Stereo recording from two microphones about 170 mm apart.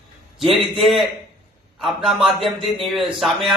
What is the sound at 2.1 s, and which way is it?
A man's voice, centre (ahead or behind).